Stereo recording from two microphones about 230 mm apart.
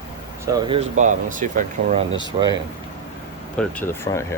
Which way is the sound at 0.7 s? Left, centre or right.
Right.